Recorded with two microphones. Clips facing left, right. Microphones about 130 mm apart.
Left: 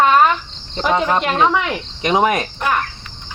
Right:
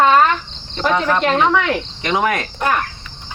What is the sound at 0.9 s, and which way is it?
Cricket, 20° left (ahead or behind).